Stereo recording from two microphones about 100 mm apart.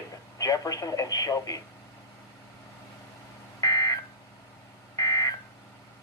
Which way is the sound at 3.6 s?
40° left (ahead or behind).